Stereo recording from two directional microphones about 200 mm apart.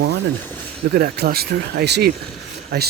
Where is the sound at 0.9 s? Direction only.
55° right (ahead or behind).